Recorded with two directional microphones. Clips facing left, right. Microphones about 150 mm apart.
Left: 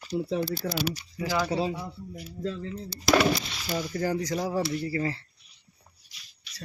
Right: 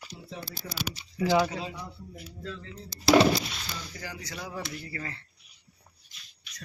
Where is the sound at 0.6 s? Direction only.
65° left (ahead or behind).